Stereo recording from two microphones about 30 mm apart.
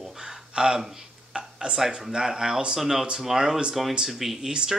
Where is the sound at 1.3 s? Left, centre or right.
Right.